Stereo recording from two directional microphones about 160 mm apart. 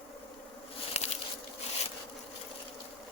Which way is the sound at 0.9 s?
40° left (ahead or behind).